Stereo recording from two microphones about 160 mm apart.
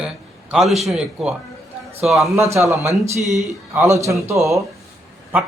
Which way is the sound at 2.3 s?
15° right (ahead or behind).